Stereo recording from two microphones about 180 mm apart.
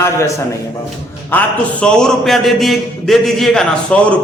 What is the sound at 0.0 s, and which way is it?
A man's voice, 15° left (ahead or behind).